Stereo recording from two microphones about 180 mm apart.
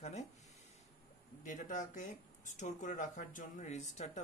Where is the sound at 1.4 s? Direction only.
45° left (ahead or behind).